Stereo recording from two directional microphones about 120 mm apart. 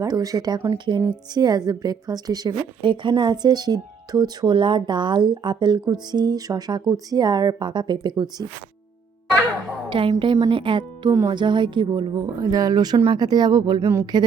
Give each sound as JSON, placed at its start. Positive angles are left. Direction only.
{"t": 0.0, "sound": "a woman's voice", "side_deg": -30}
{"t": 9.9, "sound": "a woman's voice", "side_deg": -45}